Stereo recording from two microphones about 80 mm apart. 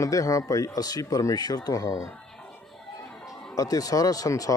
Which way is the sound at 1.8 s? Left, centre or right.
Left.